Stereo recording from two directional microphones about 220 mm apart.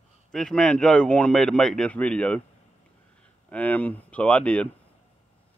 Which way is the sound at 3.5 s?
5° left (ahead or behind).